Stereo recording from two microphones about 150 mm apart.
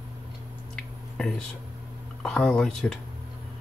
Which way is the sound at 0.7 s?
5° left (ahead or behind).